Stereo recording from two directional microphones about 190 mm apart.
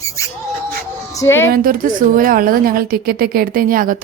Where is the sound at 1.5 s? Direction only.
50° right (ahead or behind).